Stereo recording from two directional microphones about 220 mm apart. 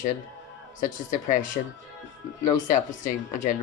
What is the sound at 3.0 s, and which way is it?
Speech, 35° left (ahead or behind).